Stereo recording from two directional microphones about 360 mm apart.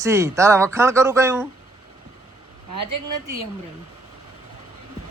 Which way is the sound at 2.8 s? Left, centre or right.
Right.